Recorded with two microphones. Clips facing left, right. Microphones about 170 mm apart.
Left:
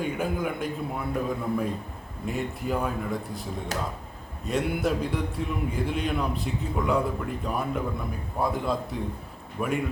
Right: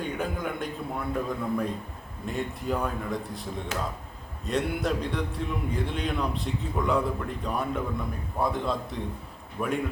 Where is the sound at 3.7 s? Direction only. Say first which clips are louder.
Left 1 dB; 40° left (ahead or behind).